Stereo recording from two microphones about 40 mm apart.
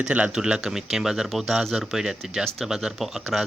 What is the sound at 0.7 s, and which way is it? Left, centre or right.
Speech, centre.